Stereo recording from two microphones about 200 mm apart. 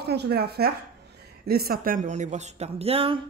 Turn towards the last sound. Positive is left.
turn(degrees=-30)  # may be behind; listen again after turning